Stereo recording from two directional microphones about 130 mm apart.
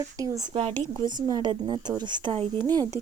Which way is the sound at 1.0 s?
35° right (ahead or behind).